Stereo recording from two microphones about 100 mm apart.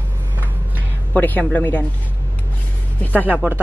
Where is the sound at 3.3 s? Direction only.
15° right (ahead or behind).